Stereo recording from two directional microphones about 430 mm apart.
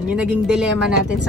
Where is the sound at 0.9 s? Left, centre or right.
Right.